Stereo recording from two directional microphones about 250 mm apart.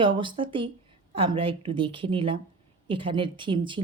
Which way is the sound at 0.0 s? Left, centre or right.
Centre.